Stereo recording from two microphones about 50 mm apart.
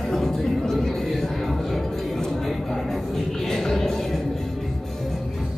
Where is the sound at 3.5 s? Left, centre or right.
Centre.